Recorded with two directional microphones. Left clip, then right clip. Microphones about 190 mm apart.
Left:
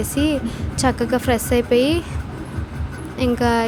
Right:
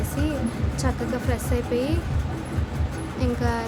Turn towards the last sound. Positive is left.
turn(degrees=40)  # may be behind; listen again after turning